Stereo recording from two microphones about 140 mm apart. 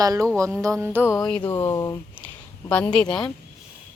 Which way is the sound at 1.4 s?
20° left (ahead or behind).